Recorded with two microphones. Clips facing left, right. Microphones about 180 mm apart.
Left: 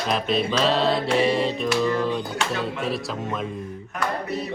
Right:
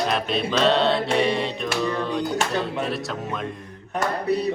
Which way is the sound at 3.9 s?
35° right (ahead or behind).